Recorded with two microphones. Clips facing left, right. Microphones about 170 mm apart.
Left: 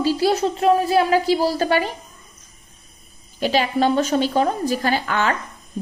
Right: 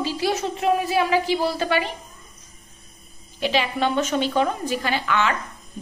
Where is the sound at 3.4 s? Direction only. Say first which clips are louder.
Left 3 dB; 40° left (ahead or behind).